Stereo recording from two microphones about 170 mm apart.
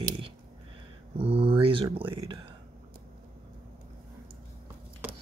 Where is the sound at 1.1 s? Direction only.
35° right (ahead or behind).